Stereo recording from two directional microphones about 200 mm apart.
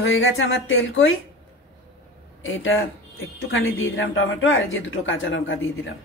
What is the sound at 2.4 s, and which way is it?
Speech, 80° left.